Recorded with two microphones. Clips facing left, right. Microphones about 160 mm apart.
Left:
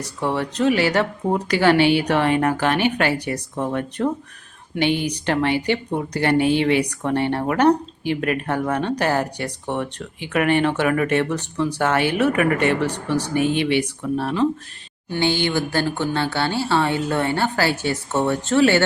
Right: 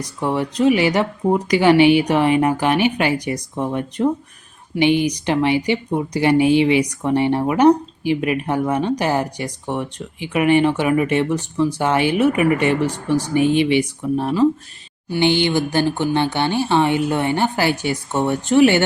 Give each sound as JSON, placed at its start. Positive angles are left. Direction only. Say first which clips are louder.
{"t": 0.0, "sound": "speech", "louder": "right 2 dB", "side_deg": -15}